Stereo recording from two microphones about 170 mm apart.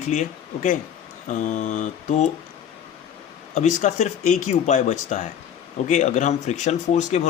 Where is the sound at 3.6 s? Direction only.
45° left (ahead or behind).